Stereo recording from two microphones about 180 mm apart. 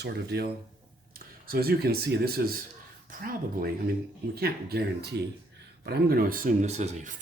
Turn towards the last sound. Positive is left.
turn(degrees=-40)  # may be behind; listen again after turning